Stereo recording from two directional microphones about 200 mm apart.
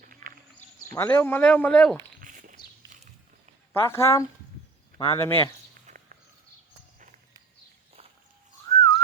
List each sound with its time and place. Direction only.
0.0 s sheep: 45° right (ahead or behind)
0.9 s a man's voice: 10° left (ahead or behind)
2.2 s a sound: 40° right (ahead or behind)
3.7 s a man's voice: 15° left (ahead or behind)
8.6 s whistling: 20° left (ahead or behind)